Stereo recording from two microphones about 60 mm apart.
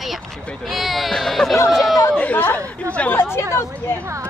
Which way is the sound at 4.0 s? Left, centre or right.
Right.